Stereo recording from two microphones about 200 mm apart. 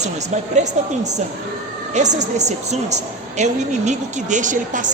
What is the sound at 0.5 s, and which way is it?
A woman's voice, 35° right (ahead or behind).